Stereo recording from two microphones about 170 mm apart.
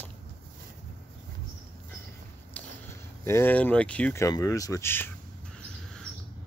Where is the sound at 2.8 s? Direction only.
15° left (ahead or behind).